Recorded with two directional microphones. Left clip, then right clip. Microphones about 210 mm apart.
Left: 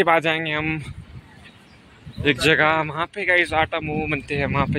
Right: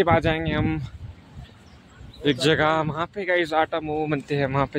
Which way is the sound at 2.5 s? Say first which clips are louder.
Left 3 dB; 10° right (ahead or behind).